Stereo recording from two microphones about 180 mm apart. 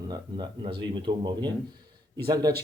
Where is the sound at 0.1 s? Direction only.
25° right (ahead or behind).